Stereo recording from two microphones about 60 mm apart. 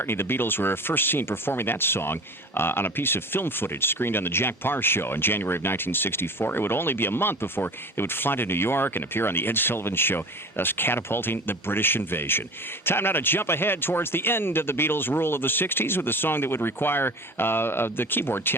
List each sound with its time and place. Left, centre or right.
0.0 s speech: left